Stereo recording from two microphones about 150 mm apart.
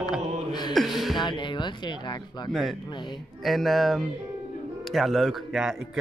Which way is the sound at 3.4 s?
Centre (ahead or behind).